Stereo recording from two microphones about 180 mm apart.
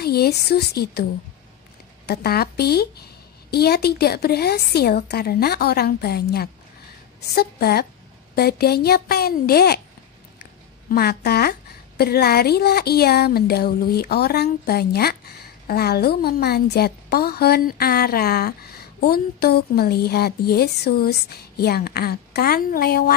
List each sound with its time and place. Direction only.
0.0 s speech: 60° left (ahead or behind)
2.0 s speech: 60° left (ahead or behind)
10.9 s speech: 60° left (ahead or behind)